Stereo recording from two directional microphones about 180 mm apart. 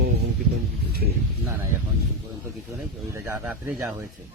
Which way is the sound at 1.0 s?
60° right (ahead or behind).